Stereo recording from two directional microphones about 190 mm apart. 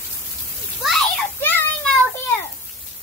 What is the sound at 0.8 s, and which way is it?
Children playing, centre (ahead or behind).